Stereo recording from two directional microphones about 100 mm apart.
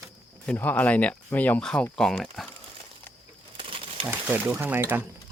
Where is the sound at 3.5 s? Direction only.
65° right (ahead or behind).